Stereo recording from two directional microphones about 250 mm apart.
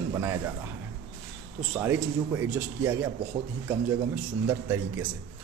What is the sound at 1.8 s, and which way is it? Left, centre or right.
A man's voice, centre.